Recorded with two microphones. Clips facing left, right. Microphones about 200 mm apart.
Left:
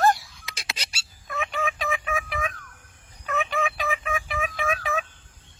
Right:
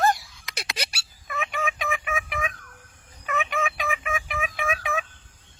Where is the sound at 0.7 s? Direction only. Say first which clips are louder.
Right 10 dB; 65° right (ahead or behind).